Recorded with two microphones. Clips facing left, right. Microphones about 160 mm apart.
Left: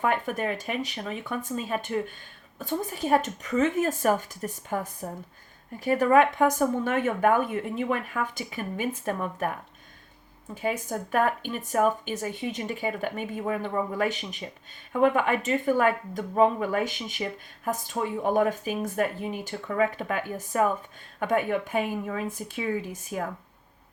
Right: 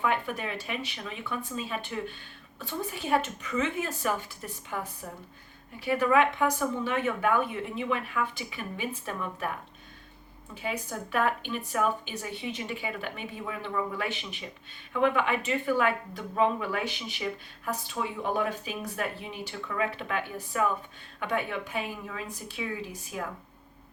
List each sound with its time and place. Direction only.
0.0 s speech: 45° left (ahead or behind)
10.5 s speech: 45° left (ahead or behind)